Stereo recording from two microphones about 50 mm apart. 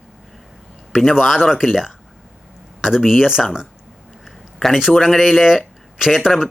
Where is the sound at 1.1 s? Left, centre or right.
Centre.